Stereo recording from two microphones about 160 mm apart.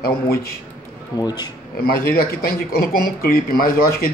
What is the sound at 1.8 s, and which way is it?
Speech, 70° left (ahead or behind).